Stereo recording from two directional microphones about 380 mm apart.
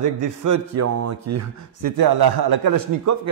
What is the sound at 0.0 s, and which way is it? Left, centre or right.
A man's voice, right.